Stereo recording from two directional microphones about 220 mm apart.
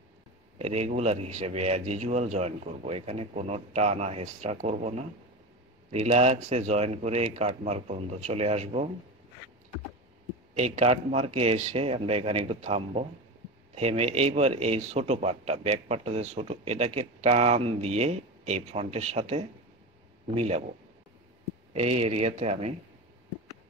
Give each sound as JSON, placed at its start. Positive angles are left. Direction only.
{"t": 0.6, "sound": "a man's voice", "side_deg": -30}
{"t": 10.5, "sound": "a man's voice", "side_deg": -30}
{"t": 21.7, "sound": "a man's voice", "side_deg": -30}